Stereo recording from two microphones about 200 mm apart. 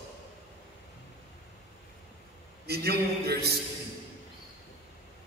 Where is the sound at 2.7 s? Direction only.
50° right (ahead or behind).